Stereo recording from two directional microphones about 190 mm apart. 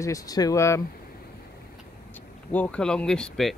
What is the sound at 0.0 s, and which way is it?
Speech, 20° left (ahead or behind).